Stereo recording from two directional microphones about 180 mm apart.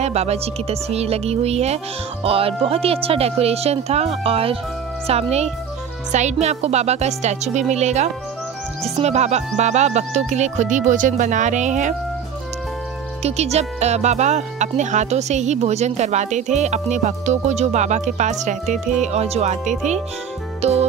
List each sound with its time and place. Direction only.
0.0 s speech: 35° right (ahead or behind)
13.2 s speech: 35° right (ahead or behind)